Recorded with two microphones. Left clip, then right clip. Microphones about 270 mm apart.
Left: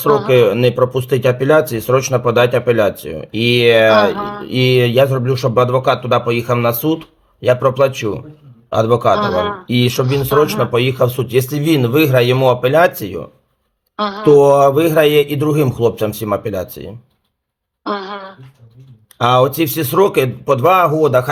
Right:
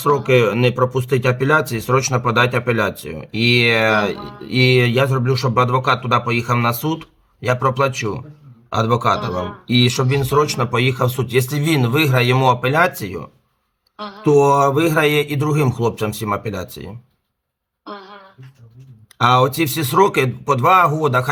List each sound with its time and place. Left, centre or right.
0.4 s a man's voice: centre
4.0 s music: left
4.4 s a man's voice: centre
13.9 s speech: left
14.5 s a man's voice: centre
17.8 s throat clearing: left
19.2 s a man's voice: centre